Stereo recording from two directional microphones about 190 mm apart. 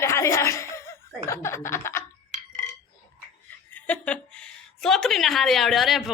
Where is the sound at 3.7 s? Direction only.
10° left (ahead or behind).